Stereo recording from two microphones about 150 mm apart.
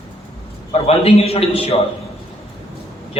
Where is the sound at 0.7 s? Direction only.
40° left (ahead or behind).